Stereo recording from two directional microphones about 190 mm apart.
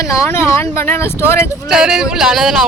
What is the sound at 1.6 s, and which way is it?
Speech, 5° right (ahead or behind).